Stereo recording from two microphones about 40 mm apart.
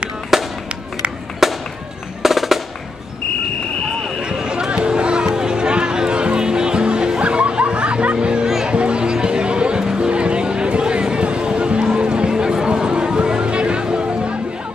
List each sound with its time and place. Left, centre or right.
0.3 s fireworks: centre
1.4 s music: centre
4.2 s a sound: right
8.6 s music: right